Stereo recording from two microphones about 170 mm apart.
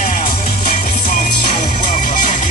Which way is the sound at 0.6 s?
50° left (ahead or behind).